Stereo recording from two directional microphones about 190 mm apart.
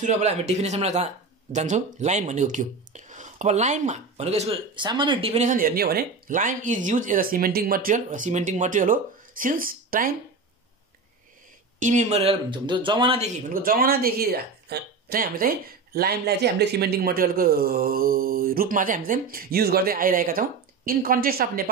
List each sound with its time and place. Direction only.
0.0 s speech: 35° right (ahead or behind)
5.5 s speech: 50° right (ahead or behind)
11.8 s speech: 40° right (ahead or behind)
13.5 s speech: 50° right (ahead or behind)